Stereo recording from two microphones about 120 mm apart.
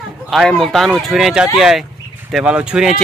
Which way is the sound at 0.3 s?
Centre (ahead or behind).